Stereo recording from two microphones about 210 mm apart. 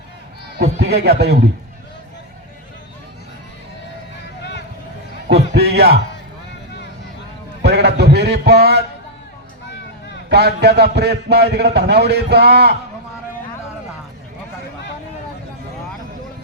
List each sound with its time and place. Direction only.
0.8 s a man's voice: 50° right (ahead or behind)
5.3 s a sound: 50° right (ahead or behind)
7.6 s a man's voice: 50° right (ahead or behind)
10.2 s a man's voice: 50° right (ahead or behind)